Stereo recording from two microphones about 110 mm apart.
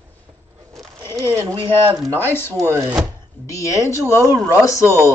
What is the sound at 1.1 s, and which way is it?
Speech, 30° right (ahead or behind).